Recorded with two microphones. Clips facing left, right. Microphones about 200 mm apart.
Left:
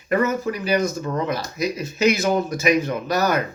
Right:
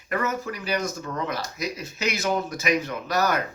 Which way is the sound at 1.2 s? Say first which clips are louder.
Left 6 dB; 10° left (ahead or behind).